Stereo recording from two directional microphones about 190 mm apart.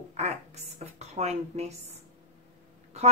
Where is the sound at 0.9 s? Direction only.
35° right (ahead or behind).